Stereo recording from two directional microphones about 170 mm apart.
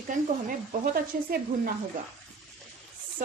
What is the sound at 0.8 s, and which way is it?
Speech, 55° right (ahead or behind).